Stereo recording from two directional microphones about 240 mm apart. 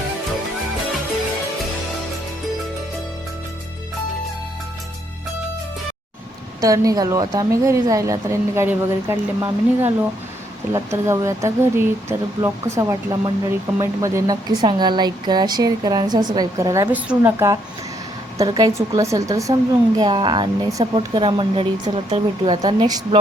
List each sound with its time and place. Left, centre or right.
6.6 s a woman's voice: centre